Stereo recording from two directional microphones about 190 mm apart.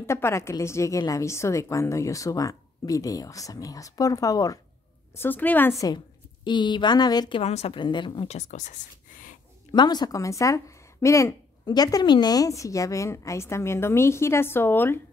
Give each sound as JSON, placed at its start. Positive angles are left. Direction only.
{"t": 0.0, "sound": "a woman's voice", "side_deg": 15}
{"t": 9.7, "sound": "speech", "side_deg": 20}